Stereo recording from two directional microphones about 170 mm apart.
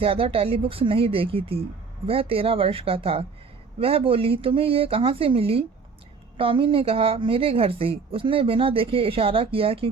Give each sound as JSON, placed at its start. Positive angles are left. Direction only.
{"t": 0.0, "sound": "a woman's voice", "side_deg": -30}